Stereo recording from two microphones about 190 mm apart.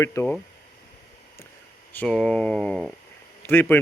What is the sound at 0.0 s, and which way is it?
Speech, 15° left (ahead or behind).